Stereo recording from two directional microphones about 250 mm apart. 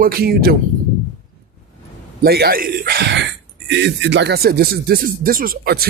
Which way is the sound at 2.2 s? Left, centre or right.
Right.